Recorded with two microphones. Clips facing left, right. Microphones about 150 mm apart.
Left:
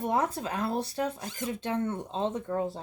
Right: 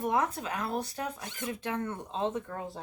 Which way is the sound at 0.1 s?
35° left (ahead or behind).